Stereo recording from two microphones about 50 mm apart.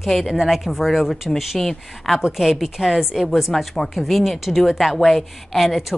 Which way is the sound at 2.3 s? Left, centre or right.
Centre.